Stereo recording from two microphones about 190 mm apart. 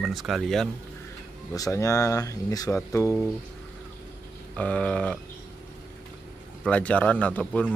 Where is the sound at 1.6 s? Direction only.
15° left (ahead or behind).